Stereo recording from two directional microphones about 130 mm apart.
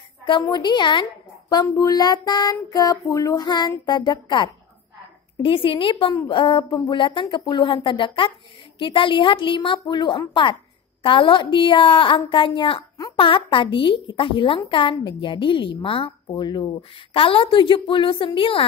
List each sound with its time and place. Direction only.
0.3 s a woman's voice: 35° left (ahead or behind)